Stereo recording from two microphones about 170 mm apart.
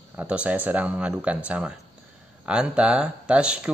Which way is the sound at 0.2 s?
5° right (ahead or behind).